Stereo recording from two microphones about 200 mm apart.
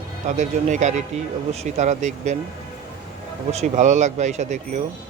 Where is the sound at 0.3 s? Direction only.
35° right (ahead or behind).